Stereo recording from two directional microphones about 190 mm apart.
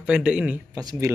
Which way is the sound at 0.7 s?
20° right (ahead or behind).